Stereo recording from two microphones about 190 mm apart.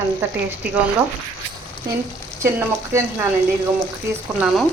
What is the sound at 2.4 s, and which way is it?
Speech, 15° right (ahead or behind).